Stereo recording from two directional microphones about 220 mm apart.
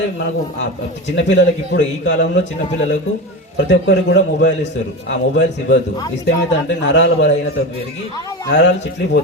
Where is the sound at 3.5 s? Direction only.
55° left (ahead or behind).